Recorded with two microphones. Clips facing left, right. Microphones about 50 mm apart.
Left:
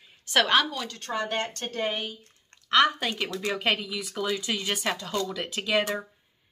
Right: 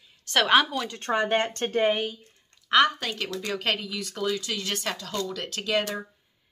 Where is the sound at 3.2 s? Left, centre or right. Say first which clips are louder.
Left 1 dB; centre.